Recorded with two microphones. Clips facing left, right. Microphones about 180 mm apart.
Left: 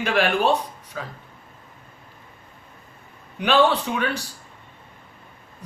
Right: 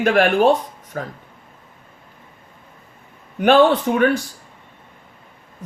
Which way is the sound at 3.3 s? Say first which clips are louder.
Right 6 dB; 50° right (ahead or behind).